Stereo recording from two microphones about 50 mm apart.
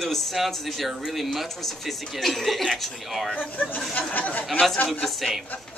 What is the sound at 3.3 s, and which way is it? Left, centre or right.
Speech, left.